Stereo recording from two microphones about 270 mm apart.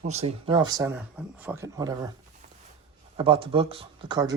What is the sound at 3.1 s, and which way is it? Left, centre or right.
Speech, centre.